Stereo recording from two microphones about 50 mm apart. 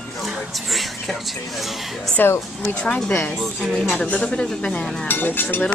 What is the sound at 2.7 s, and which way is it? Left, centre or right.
Speech, left.